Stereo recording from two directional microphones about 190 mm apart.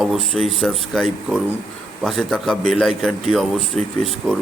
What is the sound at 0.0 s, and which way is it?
A man's voice, centre (ahead or behind).